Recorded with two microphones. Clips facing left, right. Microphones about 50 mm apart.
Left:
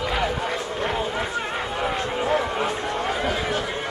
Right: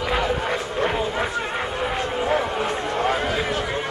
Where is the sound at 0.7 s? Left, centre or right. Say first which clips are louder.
Right 4 dB; right.